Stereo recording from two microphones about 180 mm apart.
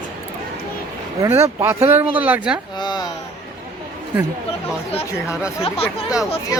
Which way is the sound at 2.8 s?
25° left (ahead or behind).